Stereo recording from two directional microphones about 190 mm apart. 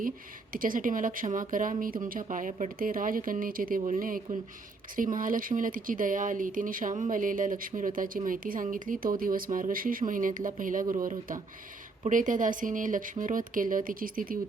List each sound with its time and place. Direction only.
0.5 s speech: 45° right (ahead or behind)